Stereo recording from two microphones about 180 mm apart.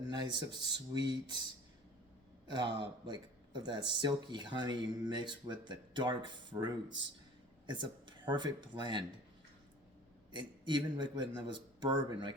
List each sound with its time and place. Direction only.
0.1 s speech: 25° right (ahead or behind)
2.5 s speech: 25° right (ahead or behind)
10.3 s speech: 25° right (ahead or behind)